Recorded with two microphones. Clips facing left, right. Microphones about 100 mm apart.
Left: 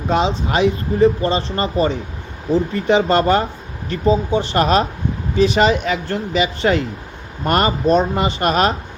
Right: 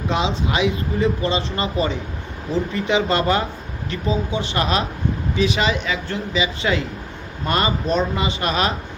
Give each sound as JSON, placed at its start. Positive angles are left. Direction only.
{"t": 0.1, "sound": "speech", "side_deg": 40}